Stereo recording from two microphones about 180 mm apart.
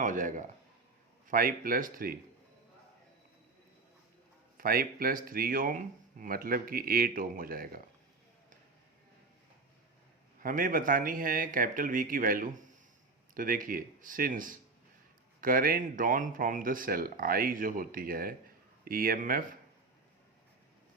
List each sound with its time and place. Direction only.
0.0 s a man's voice: 45° right (ahead or behind)
4.5 s speech: 55° right (ahead or behind)
10.4 s speech: 50° right (ahead or behind)